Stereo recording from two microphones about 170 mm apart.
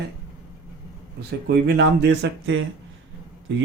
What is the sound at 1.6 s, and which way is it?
Speech, 85° right.